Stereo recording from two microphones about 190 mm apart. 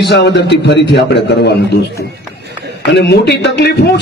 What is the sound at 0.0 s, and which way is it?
A man's voice, 65° left (ahead or behind).